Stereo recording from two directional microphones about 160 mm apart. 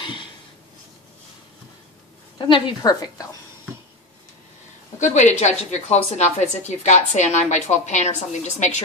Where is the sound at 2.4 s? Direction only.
30° left (ahead or behind).